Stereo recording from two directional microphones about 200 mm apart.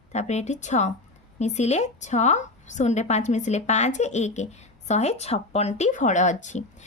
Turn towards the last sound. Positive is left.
turn(degrees=35)  # may be behind; listen again after turning